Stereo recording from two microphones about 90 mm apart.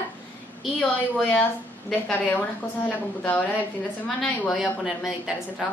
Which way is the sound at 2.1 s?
20° left (ahead or behind).